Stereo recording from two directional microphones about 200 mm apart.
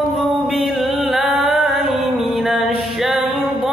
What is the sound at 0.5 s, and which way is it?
Music, centre (ahead or behind).